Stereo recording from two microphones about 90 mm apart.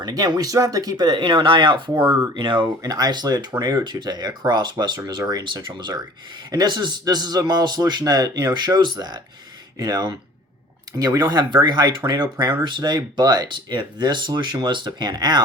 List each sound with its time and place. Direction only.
0.0 s speech: 45° right (ahead or behind)
1.4 s speech: 65° right (ahead or behind)
2.8 s speech: 45° right (ahead or behind)